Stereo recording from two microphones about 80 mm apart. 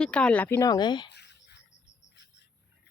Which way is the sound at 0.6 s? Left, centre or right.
Left.